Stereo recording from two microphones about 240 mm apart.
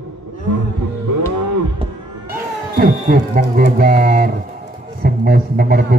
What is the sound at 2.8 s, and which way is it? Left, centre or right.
Speech, right.